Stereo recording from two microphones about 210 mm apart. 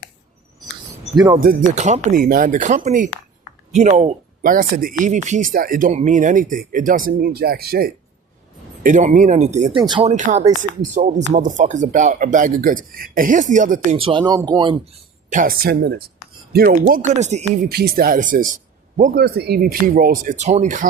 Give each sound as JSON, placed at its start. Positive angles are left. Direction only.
{"t": 1.4, "sound": "speech", "side_deg": -40}
{"t": 9.8, "sound": "speech", "side_deg": -20}
{"t": 10.1, "sound": "speech", "side_deg": -35}
{"t": 15.3, "sound": "speech", "side_deg": -40}
{"t": 17.7, "sound": "speech", "side_deg": -45}
{"t": 19.2, "sound": "speech", "side_deg": -50}